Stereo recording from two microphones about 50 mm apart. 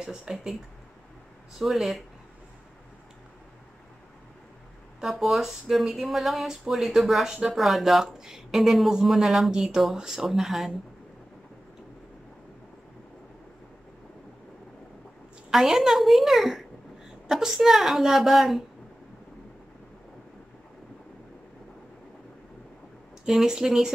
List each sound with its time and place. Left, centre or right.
0.0 s speech: centre
1.6 s speech: centre
5.0 s speech: centre
15.5 s speech: centre
23.2 s speech: centre